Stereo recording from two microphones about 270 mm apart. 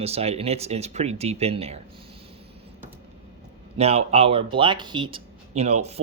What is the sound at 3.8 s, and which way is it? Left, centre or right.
Speech, right.